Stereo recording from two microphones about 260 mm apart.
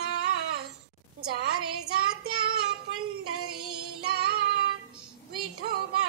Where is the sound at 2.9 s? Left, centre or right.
Right.